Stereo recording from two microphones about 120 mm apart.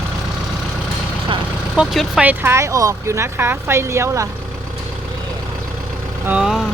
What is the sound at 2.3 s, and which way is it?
Speech, 20° right (ahead or behind).